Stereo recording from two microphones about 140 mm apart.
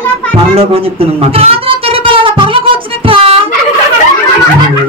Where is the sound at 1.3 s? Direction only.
45° right (ahead or behind).